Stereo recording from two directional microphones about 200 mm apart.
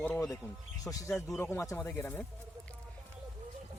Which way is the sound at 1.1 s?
5° left (ahead or behind).